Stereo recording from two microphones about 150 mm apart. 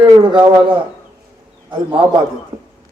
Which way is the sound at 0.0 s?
35° right (ahead or behind).